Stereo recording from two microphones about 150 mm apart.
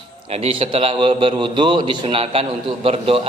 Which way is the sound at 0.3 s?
40° right (ahead or behind).